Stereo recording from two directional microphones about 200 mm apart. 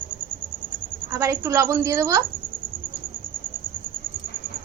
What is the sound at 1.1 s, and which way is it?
A woman's voice, 15° right (ahead or behind).